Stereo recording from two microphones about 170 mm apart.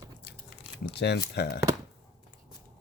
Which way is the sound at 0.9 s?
75° left (ahead or behind).